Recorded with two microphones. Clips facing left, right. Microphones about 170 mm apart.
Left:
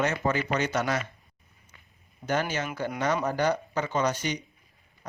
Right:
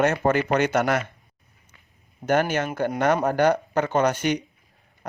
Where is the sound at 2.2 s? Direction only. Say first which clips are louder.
Right 7 dB; 55° right (ahead or behind).